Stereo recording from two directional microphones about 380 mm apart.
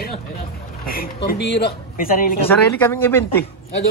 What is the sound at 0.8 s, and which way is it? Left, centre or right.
Speech, left.